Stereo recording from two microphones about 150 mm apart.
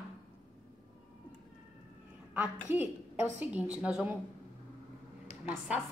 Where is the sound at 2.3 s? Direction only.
10° right (ahead or behind).